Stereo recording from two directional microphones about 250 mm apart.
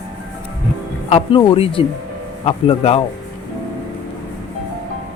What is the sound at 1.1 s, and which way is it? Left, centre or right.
A man's voice, left.